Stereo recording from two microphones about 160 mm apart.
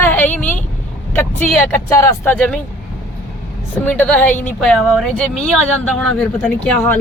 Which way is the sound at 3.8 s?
10° left (ahead or behind).